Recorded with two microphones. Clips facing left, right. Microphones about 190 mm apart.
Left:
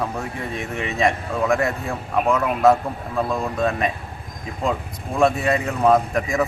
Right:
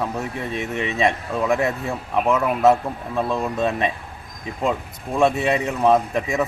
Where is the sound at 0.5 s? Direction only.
20° right (ahead or behind).